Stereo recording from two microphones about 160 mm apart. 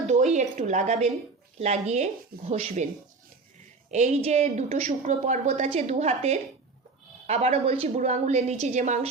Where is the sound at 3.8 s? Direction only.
45° right (ahead or behind).